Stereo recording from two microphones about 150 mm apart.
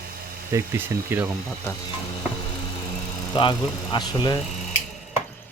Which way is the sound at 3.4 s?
30° left (ahead or behind).